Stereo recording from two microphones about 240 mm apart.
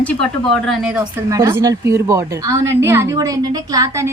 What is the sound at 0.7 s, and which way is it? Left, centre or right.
A woman's voice, centre.